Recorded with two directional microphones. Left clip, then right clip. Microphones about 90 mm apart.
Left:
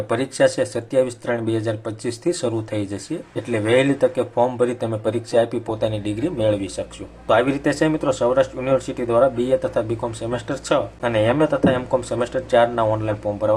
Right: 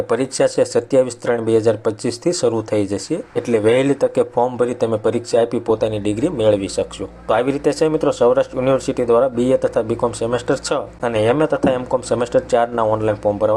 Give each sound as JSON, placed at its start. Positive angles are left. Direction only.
{"t": 0.1, "sound": "speech", "side_deg": -35}